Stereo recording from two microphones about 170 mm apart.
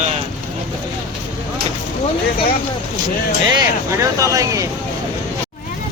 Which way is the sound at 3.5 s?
20° right (ahead or behind).